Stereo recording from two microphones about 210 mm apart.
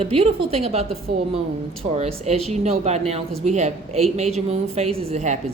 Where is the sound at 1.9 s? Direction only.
30° right (ahead or behind).